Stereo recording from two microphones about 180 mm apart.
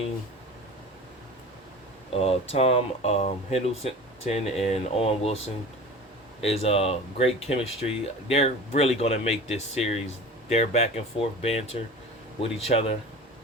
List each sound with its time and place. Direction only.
2.1 s speech: 35° left (ahead or behind)
6.4 s speech: 35° left (ahead or behind)